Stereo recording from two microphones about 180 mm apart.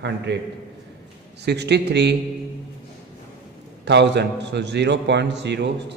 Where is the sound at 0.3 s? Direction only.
70° right (ahead or behind).